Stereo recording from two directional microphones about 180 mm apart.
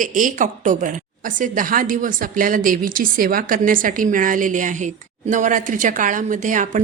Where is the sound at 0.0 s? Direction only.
45° right (ahead or behind).